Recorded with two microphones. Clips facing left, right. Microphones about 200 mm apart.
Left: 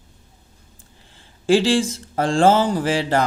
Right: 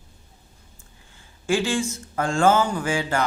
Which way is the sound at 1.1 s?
35° left (ahead or behind).